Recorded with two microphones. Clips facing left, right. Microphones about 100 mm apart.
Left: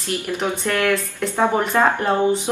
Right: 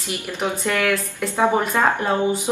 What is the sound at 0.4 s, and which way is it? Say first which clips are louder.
Speech: right 1 dB; 5° right (ahead or behind).